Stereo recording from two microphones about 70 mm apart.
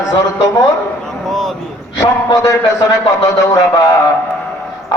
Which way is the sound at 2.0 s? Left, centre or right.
Left.